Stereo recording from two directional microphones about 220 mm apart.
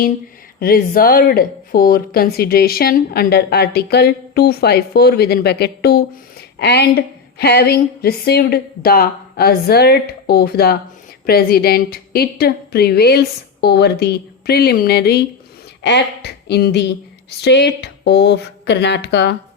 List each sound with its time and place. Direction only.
0.6 s speech: 40° left (ahead or behind)